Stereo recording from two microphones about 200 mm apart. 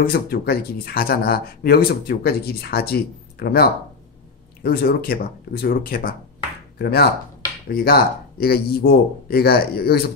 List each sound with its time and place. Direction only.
0.0 s speech: 50° left (ahead or behind)